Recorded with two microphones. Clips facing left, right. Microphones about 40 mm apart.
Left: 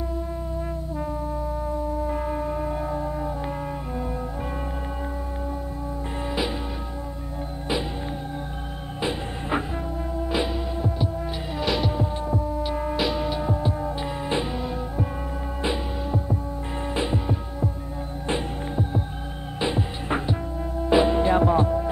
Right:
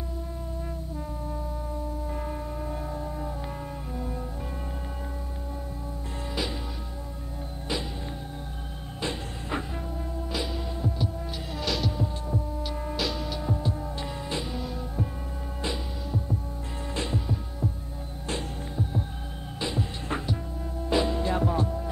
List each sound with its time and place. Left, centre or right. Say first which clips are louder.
2.0 s music: left 7 dB; left
9.0 s music: left 5 dB; left
11.5 s heart sounds: left 5 dB; left
14.4 s music: left 5 dB; left
18.2 s hum: left 6 dB; left
19.6 s music: left 5 dB; left